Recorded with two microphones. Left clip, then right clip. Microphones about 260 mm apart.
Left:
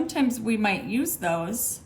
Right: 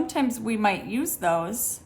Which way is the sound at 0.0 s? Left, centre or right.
Centre.